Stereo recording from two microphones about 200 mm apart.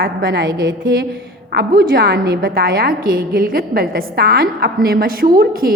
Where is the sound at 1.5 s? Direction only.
55° right (ahead or behind).